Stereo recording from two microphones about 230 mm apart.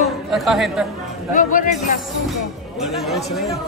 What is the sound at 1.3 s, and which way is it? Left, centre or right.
Speech, left.